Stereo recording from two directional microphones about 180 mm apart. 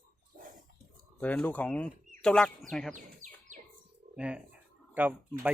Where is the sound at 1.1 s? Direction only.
10° left (ahead or behind).